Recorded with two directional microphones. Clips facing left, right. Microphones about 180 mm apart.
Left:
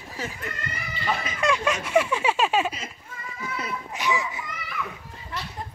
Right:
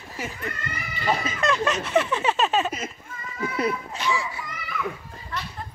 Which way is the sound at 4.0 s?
20° left (ahead or behind).